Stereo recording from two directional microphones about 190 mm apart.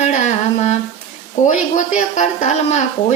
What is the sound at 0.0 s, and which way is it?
Humming, 35° left (ahead or behind).